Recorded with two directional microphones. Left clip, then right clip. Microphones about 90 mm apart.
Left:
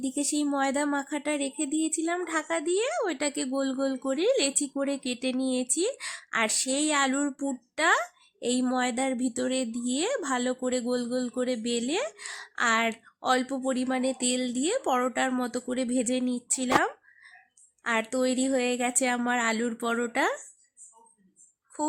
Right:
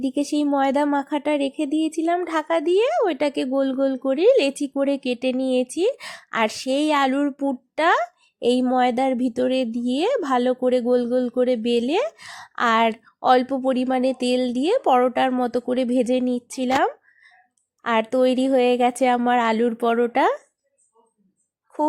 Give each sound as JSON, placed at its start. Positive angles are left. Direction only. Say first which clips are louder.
{"t": 0.0, "sound": "a woman's voice", "louder": "right 7 dB", "side_deg": -35}
{"t": 7.8, "sound": "a woman's voice", "louder": "right 5 dB", "side_deg": -30}